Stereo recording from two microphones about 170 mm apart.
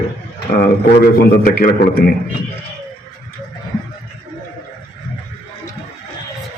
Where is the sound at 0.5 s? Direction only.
65° left (ahead or behind).